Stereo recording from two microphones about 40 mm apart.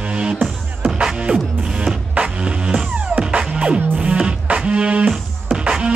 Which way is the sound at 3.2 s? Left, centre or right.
Right.